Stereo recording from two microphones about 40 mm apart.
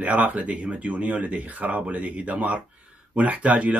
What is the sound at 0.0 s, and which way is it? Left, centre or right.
Speech, right.